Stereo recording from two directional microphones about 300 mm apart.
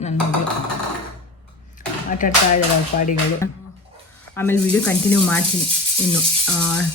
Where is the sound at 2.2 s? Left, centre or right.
Left.